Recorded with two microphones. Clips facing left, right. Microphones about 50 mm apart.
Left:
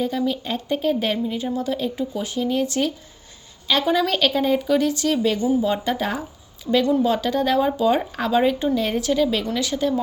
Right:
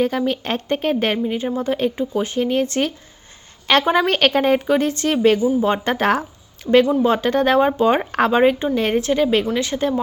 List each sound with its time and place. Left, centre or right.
0.0 s speech: right
6.7 s speech: right